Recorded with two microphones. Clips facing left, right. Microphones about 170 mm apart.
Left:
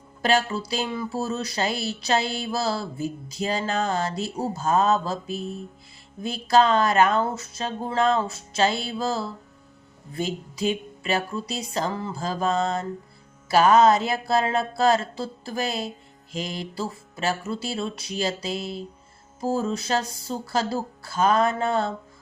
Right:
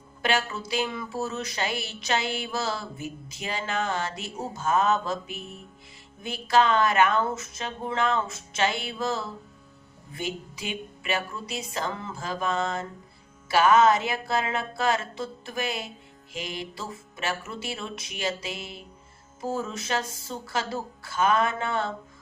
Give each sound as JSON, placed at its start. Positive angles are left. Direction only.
{"t": 0.2, "sound": "speech", "side_deg": 35}